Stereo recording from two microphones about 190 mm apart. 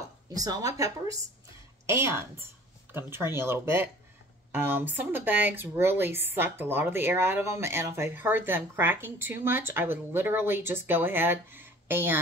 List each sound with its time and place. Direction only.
0.4 s speech: 20° right (ahead or behind)